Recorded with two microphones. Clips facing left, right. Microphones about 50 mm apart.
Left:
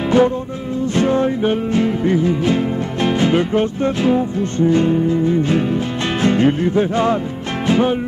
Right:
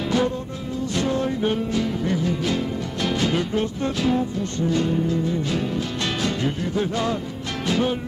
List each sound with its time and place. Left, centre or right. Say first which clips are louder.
0.1 s music: left 9 dB; left